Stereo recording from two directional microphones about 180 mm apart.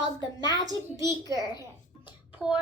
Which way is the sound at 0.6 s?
20° right (ahead or behind).